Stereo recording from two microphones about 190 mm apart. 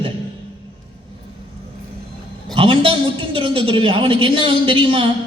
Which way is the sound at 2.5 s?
30° right (ahead or behind).